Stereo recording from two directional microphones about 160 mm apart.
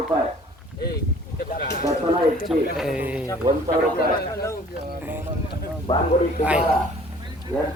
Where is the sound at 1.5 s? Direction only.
75° left (ahead or behind).